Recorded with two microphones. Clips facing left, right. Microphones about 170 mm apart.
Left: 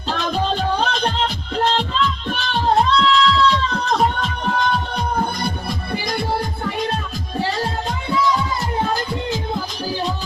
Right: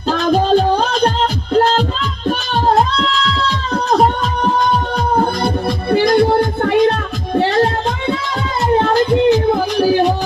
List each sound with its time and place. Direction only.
0.1 s music: 40° right (ahead or behind)
5.4 s music: 85° right; by 10.2 s 65° right (ahead or behind)